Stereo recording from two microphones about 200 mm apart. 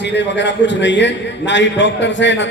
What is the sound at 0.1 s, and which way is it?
A man's voice, 60° left (ahead or behind).